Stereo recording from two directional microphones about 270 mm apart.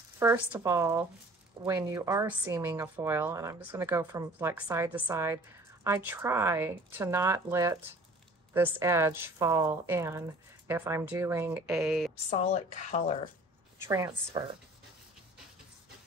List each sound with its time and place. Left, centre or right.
0.2 s a woman's voice: centre
12.3 s speech: left
13.7 s a woman's voice: centre